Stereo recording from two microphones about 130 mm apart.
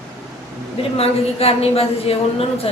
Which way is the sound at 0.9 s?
50° left (ahead or behind).